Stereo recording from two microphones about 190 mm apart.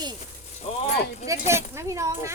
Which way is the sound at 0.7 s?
30° left (ahead or behind).